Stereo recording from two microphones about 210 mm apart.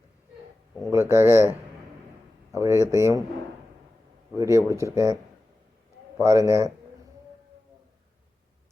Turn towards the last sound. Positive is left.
turn(degrees=-15)  # may be behind; listen again after turning